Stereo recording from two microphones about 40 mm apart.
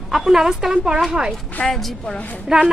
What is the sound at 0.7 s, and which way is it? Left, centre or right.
Speech, right.